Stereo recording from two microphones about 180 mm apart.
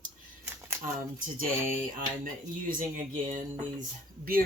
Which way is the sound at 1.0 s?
50° right (ahead or behind).